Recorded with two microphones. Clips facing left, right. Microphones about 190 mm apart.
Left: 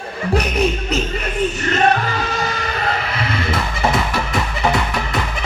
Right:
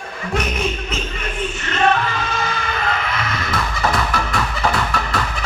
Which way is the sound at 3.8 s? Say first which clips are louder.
Left 1 dB; 20° left (ahead or behind).